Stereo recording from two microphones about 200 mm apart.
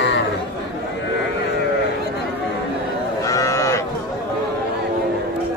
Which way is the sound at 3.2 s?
15° left (ahead or behind).